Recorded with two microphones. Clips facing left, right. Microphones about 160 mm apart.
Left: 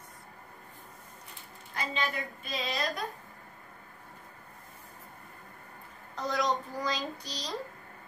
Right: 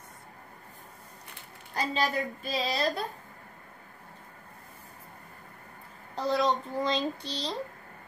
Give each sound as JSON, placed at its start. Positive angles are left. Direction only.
{"t": 1.8, "sound": "a woman's voice", "side_deg": -35}
{"t": 6.1, "sound": "child singing", "side_deg": -30}